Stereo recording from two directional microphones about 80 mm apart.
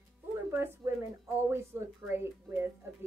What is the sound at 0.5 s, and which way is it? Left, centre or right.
A woman's voice, right.